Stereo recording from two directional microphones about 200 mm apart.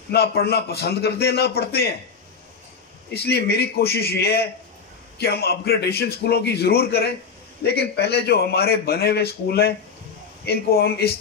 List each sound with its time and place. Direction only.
0.1 s a man's voice: 55° left (ahead or behind)
3.1 s a man's voice: 55° left (ahead or behind)